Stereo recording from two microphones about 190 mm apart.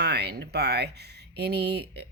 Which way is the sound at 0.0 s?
60° right (ahead or behind).